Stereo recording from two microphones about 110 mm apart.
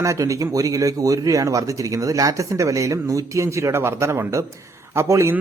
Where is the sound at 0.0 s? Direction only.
30° right (ahead or behind).